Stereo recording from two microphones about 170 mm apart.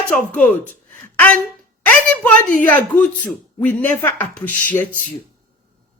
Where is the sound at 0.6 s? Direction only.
50° right (ahead or behind).